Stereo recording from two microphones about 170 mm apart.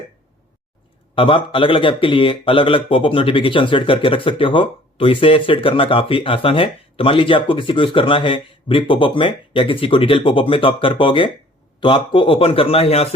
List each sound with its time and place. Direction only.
1.1 s speech: 30° left (ahead or behind)